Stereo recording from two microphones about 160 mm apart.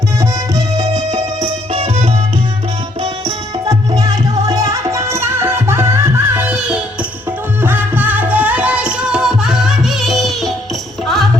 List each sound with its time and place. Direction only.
0.2 s music: 25° right (ahead or behind)
3.7 s music: 20° right (ahead or behind); by 11.3 s centre (ahead or behind)